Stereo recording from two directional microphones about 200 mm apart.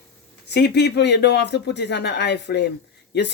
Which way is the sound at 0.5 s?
55° left (ahead or behind).